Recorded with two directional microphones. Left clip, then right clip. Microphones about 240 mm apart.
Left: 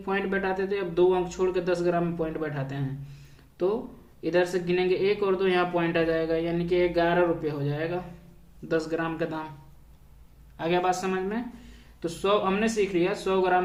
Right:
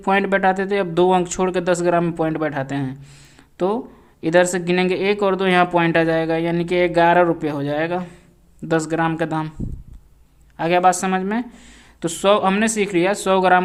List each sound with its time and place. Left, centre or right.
0.0 s speech: right
4.2 s speech: right
10.6 s speech: right